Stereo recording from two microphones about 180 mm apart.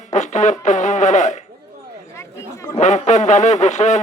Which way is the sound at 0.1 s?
40° left (ahead or behind).